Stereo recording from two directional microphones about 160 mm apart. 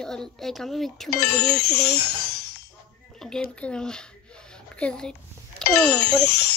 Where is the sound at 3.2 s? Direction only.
Centre (ahead or behind).